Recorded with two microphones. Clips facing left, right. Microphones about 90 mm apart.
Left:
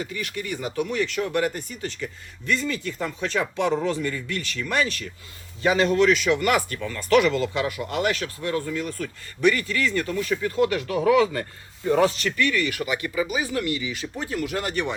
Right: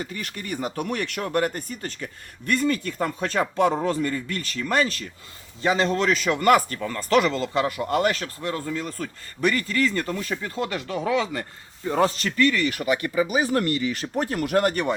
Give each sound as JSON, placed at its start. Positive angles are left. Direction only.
{"t": 0.0, "sound": "speech", "side_deg": -40}
{"t": 11.9, "sound": "speech", "side_deg": -35}
{"t": 13.2, "sound": "speech", "side_deg": -50}